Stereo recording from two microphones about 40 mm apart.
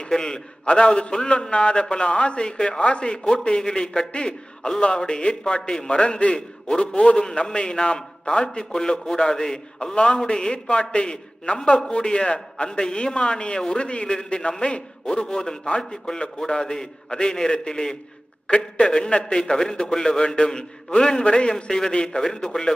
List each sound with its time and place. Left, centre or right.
0.3 s a man's voice: left